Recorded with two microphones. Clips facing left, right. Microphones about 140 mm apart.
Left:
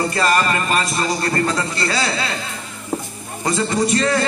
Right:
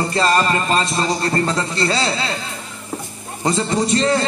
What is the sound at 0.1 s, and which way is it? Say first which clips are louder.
A man's voice: right 1 dB; 25° right (ahead or behind).